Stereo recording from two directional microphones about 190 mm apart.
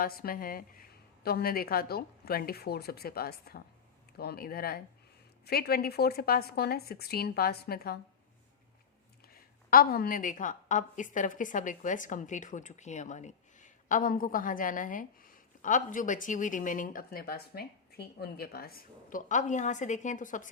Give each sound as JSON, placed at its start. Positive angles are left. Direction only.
{"t": 0.0, "sound": "a woman's voice", "side_deg": 50}
{"t": 9.6, "sound": "a woman's voice", "side_deg": 50}